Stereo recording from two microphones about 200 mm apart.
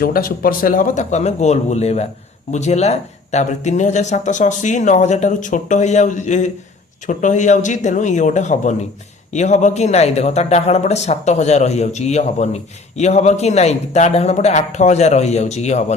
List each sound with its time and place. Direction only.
0.0 s speech: 50° left (ahead or behind)